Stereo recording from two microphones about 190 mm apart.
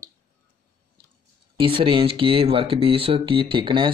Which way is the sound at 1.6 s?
25° right (ahead or behind).